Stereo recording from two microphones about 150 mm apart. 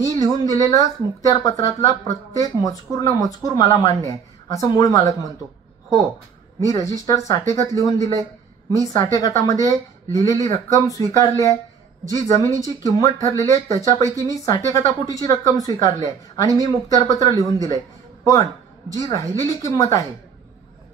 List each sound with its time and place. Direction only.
0.0 s speech: 25° left (ahead or behind)
6.6 s speech: 25° left (ahead or behind)